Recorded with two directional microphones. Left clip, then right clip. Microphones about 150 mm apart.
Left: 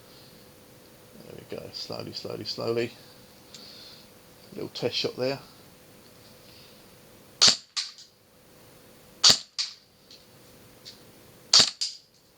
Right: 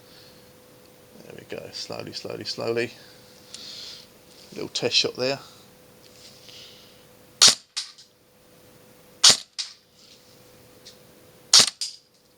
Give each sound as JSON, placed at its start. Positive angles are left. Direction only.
{"t": 1.4, "sound": "speech", "side_deg": -10}
{"t": 4.5, "sound": "speech", "side_deg": -20}
{"t": 7.3, "sound": "cap gun", "side_deg": -5}
{"t": 9.2, "sound": "cap gun", "side_deg": -10}
{"t": 11.5, "sound": "cap gun", "side_deg": -5}